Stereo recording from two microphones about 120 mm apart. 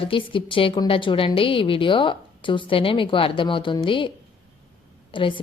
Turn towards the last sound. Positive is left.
turn(degrees=45)  # may be behind; listen again after turning